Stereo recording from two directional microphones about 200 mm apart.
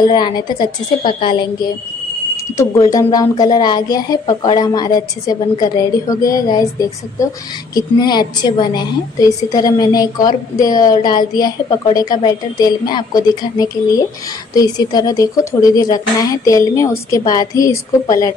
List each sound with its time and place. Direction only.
0.0 s a woman's voice: 20° left (ahead or behind)